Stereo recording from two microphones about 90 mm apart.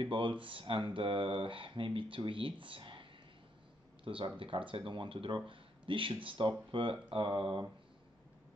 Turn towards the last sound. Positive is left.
turn(degrees=-75)  # may be behind; listen again after turning